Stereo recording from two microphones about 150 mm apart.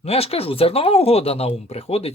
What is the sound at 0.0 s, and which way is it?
Speech, 40° left (ahead or behind).